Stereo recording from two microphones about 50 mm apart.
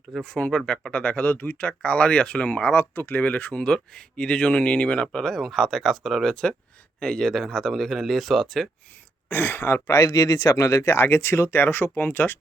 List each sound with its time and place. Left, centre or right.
0.5 s speech: centre; by 1.7 s left
1.8 s speech: centre
2.7 s speech: left
3.2 s speech: left
5.2 s speech: centre
7.0 s speech: centre
9.3 s speech: left
9.9 s speech: left
11.0 s speech: left
11.5 s speech: left